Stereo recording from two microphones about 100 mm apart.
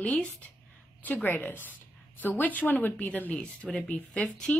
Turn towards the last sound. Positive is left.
turn(degrees=15)  # may be behind; listen again after turning